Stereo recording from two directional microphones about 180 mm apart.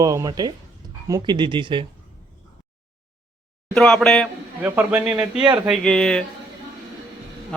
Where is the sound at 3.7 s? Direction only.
5° left (ahead or behind).